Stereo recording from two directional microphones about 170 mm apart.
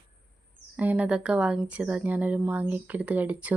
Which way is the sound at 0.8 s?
10° right (ahead or behind).